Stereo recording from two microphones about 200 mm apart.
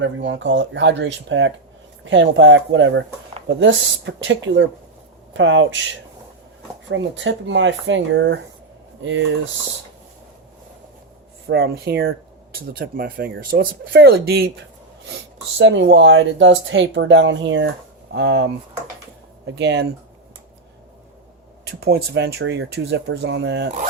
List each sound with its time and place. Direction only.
0.0 s speech: 65° right (ahead or behind)
11.4 s speech: 55° right (ahead or behind)
15.0 s speech: 65° right (ahead or behind)
19.5 s speech: 60° right (ahead or behind)
21.8 s speech: 55° right (ahead or behind)